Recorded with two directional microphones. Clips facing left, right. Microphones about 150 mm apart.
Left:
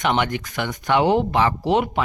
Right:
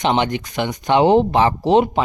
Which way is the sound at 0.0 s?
20° right (ahead or behind).